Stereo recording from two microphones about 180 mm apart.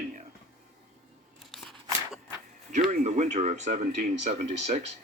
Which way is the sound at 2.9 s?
40° right (ahead or behind).